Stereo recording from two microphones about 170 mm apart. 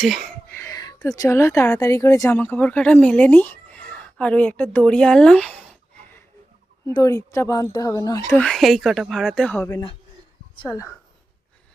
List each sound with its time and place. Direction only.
0.0 s speech: centre (ahead or behind)
0.5 s a woman's voice: 15° left (ahead or behind)
8.4 s speech: centre (ahead or behind)